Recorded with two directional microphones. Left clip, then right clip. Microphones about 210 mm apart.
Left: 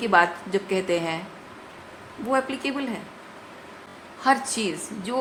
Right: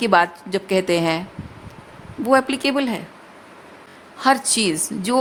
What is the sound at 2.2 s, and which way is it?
Speech, 50° right (ahead or behind).